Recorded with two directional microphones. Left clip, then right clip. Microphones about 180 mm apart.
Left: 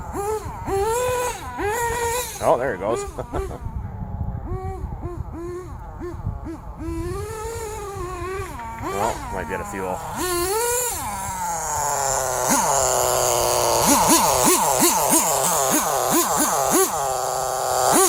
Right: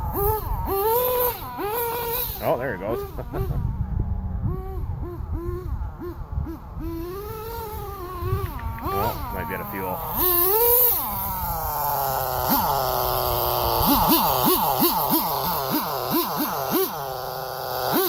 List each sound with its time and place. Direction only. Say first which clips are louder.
0.1 s wail: even; 10° right (ahead or behind); by 2.0 s 15° left (ahead or behind)
2.5 s speech: left 5 dB; 40° left (ahead or behind)
8.8 s zipper: left 1 dB; 15° left (ahead or behind)
9.0 s speech: left 3 dB; 40° left (ahead or behind)
9.8 s a sound: right 1 dB; centre (ahead or behind); by 18.0 s 50° left (ahead or behind)